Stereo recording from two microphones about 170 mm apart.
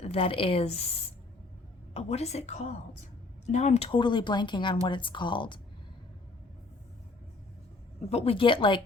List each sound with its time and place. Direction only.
0.0 s a woman's voice: 35° left (ahead or behind)
8.1 s a woman's voice: 35° left (ahead or behind)